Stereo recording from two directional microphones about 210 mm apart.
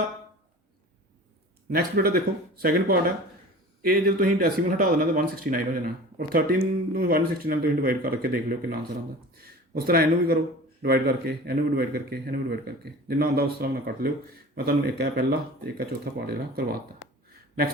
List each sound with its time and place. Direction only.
1.7 s a man's voice: 45° right (ahead or behind)